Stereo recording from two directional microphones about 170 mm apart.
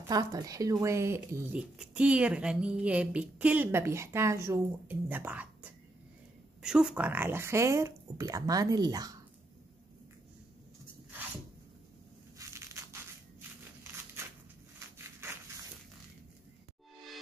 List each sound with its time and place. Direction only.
0.1 s speech: 20° right (ahead or behind)
12.4 s crushing: 15° right (ahead or behind)
15.0 s a sound: 15° right (ahead or behind)